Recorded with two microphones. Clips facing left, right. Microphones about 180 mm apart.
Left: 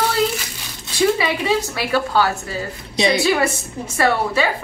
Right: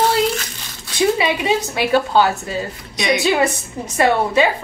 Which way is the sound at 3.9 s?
20° right (ahead or behind).